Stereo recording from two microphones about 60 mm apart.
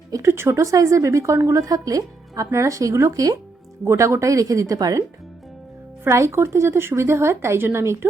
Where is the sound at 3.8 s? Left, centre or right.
Right.